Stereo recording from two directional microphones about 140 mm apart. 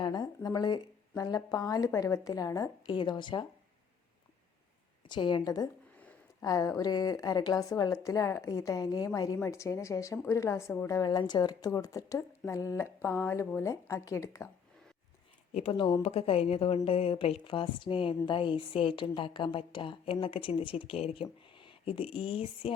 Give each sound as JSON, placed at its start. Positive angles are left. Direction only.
{"t": 0.0, "sound": "a woman's voice", "side_deg": 30}
{"t": 5.0, "sound": "a woman's voice", "side_deg": 35}
{"t": 15.5, "sound": "a woman's voice", "side_deg": 40}